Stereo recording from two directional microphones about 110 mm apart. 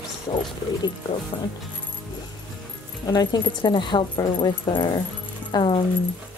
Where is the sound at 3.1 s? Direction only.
40° left (ahead or behind).